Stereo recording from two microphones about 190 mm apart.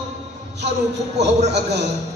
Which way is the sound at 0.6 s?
60° right (ahead or behind).